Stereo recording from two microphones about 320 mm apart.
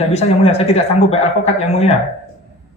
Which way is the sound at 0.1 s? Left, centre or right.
Centre.